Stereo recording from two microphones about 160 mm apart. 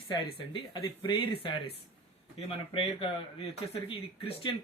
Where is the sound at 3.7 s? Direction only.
35° left (ahead or behind).